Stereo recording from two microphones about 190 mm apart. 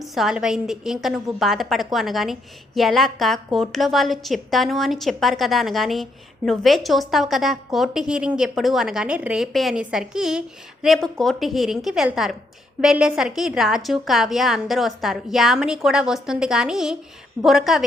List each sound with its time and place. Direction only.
0.0 s a woman's voice: centre (ahead or behind)